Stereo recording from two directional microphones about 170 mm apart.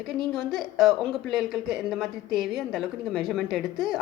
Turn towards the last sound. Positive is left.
turn(degrees=0)  # may be behind; listen again after turning